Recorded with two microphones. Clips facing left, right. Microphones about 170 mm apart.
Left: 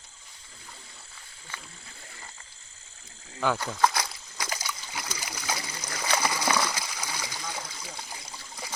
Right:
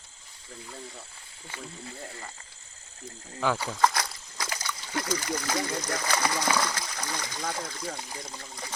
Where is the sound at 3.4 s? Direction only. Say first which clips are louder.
Even; centre (ahead or behind).